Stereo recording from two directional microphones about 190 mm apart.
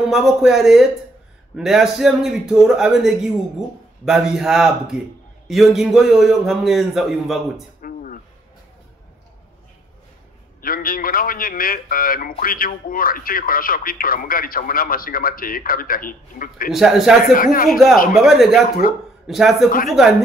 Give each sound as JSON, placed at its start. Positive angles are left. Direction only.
{"t": 0.1, "sound": "a man's voice", "side_deg": 0}
{"t": 7.8, "sound": "a sound", "side_deg": 45}
{"t": 10.6, "sound": "a man's voice", "side_deg": 50}
{"t": 16.7, "sound": "a man's voice", "side_deg": 0}
{"t": 17.2, "sound": "a man's voice", "side_deg": 50}
{"t": 17.6, "sound": "a man's voice", "side_deg": 0}